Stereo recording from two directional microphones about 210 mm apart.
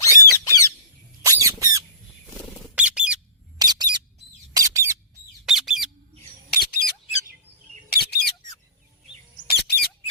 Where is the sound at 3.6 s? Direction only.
20° right (ahead or behind).